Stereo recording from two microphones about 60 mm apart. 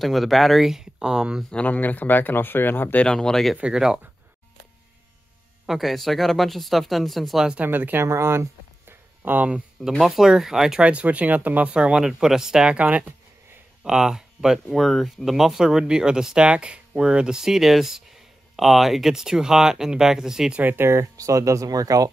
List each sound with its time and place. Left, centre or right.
0.0 s speech: centre
1.5 s speech: left
3.0 s speech: centre
3.7 s speech: centre
5.7 s speech: centre
7.6 s speech: right
8.0 s a sound: right
9.8 s speech: centre
10.8 s speech: right
13.8 s speech: centre
20.6 s speech: right